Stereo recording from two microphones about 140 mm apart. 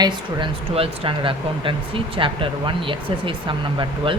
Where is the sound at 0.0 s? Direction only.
35° right (ahead or behind).